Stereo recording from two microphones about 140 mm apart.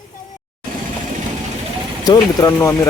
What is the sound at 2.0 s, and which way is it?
Speech, 30° left (ahead or behind).